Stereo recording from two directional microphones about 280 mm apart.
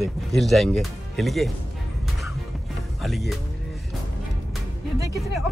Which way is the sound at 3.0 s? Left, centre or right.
Centre.